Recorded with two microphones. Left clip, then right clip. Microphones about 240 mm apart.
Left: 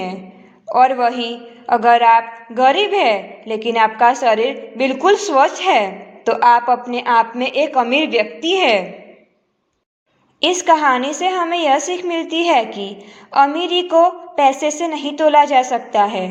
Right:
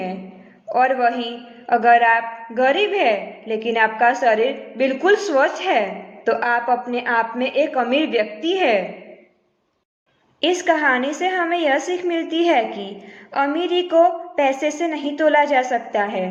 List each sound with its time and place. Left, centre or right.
0.7 s a man's voice: centre
10.4 s a man's voice: left